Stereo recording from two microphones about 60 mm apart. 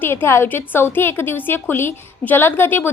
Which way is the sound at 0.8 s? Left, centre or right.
Left.